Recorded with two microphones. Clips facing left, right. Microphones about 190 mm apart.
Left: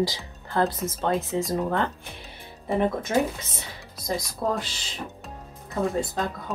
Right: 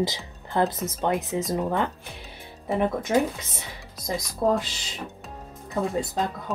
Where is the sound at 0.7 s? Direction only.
Centre (ahead or behind).